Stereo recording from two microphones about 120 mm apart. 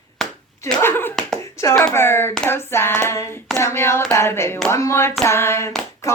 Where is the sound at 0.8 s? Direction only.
20° left (ahead or behind).